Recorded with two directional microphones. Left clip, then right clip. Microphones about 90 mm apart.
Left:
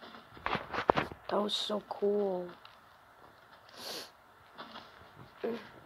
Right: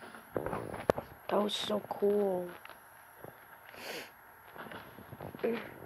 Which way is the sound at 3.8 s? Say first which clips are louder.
Even; 15° right (ahead or behind).